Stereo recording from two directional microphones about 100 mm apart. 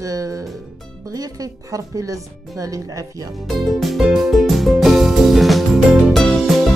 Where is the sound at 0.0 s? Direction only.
35° right (ahead or behind).